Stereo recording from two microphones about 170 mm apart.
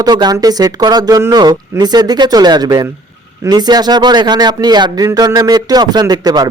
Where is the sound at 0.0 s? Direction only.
25° right (ahead or behind).